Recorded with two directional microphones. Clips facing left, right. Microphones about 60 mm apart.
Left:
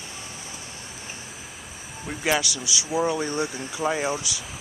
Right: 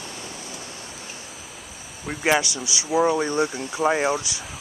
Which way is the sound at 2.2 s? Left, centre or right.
Right.